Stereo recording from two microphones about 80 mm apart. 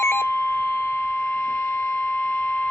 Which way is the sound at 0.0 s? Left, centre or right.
Left.